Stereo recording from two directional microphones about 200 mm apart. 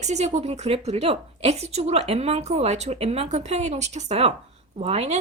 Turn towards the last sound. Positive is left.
turn(degrees=-30)  # may be behind; listen again after turning